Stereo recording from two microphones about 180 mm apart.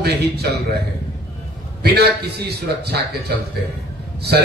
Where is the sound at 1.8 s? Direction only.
65° right (ahead or behind).